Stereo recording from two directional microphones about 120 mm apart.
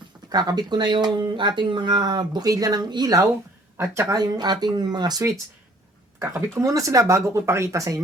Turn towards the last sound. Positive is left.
turn(degrees=-25)  # may be behind; listen again after turning